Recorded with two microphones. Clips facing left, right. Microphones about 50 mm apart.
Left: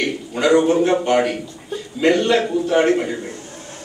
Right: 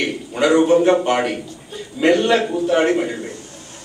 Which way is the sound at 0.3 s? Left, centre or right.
Centre.